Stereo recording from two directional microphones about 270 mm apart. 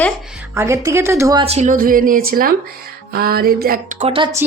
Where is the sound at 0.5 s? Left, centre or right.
Centre.